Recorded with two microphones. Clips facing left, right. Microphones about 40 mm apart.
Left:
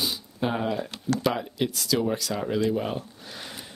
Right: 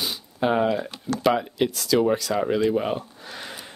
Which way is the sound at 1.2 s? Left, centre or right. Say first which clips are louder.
Right 8 dB; centre.